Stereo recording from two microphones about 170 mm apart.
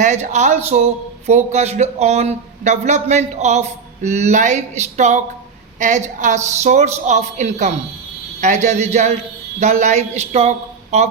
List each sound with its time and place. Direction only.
0.0 s a man's voice: 45° right (ahead or behind)